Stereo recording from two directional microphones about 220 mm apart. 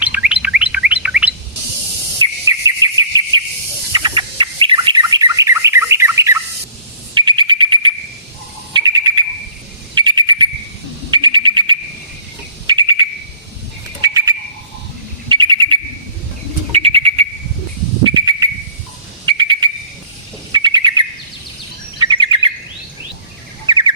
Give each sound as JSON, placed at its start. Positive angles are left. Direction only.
{"t": 0.0, "sound": "chirp", "side_deg": -5}
{"t": 2.2, "sound": "cricket", "side_deg": -15}
{"t": 3.9, "sound": "bird", "side_deg": -20}
{"t": 16.7, "sound": "frog", "side_deg": -25}
{"t": 18.0, "sound": "whistle", "side_deg": -20}
{"t": 19.2, "sound": "a sound", "side_deg": -20}
{"t": 20.5, "sound": "bird", "side_deg": -20}
{"t": 23.6, "sound": "bird", "side_deg": -20}